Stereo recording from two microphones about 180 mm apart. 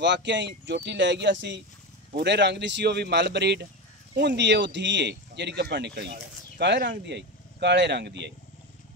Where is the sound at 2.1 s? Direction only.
70° right (ahead or behind).